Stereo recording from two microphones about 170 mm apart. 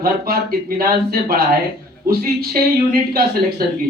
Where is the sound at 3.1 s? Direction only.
60° right (ahead or behind).